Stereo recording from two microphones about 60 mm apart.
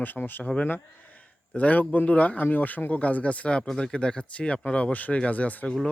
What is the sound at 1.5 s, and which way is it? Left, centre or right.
Speech, left.